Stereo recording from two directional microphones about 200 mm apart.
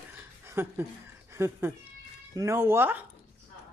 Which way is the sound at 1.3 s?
15° right (ahead or behind).